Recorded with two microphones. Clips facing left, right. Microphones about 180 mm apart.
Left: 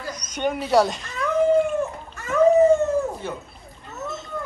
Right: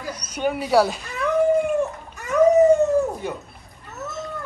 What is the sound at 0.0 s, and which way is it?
Cat, 10° right (ahead or behind).